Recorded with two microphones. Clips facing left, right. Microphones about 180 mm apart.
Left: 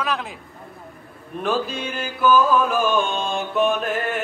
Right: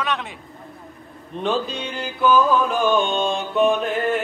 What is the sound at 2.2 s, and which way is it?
Mantra, centre (ahead or behind).